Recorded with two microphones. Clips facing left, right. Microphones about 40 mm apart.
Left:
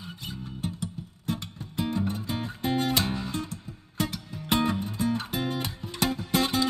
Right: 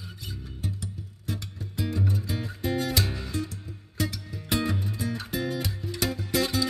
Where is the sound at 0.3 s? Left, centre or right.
Left.